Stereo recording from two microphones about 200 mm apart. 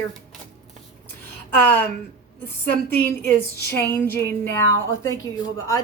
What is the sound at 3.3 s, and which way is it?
A woman's voice, 10° left (ahead or behind).